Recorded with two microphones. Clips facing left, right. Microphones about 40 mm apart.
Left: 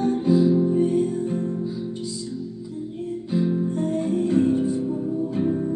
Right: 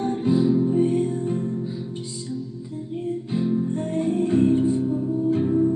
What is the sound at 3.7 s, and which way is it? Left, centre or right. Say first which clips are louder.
Music: even; right.